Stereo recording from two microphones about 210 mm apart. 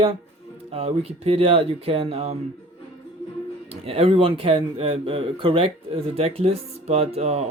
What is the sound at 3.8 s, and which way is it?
Speech, 30° right (ahead or behind).